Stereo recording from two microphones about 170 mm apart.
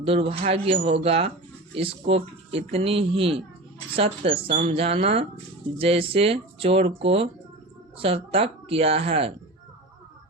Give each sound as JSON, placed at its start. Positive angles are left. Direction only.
{"t": 0.0, "sound": "speech", "side_deg": -35}